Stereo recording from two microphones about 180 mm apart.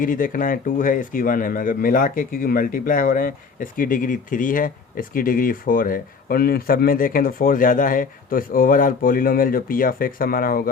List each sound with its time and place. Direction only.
0.0 s speech: 50° left (ahead or behind)